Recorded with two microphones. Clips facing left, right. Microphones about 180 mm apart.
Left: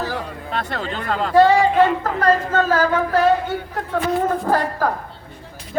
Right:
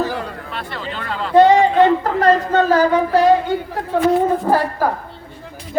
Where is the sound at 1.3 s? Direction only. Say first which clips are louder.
Right 3 dB; 20° right (ahead or behind).